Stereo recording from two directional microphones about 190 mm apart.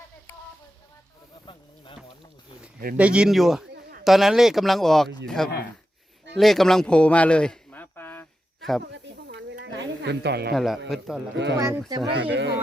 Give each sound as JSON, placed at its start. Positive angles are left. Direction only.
{"t": 1.5, "sound": "a sound", "side_deg": 30}
{"t": 3.0, "sound": "speech", "side_deg": -5}
{"t": 6.3, "sound": "a sound", "side_deg": 0}
{"t": 8.8, "sound": "snake", "side_deg": -65}
{"t": 10.5, "sound": "speech", "side_deg": 0}
{"t": 11.5, "sound": "speech", "side_deg": -15}
{"t": 12.3, "sound": "speech", "side_deg": -70}